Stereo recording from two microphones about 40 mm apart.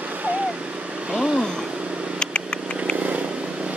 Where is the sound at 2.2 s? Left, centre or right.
Left.